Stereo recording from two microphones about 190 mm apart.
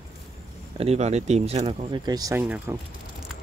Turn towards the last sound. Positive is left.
turn(degrees=-5)  # may be behind; listen again after turning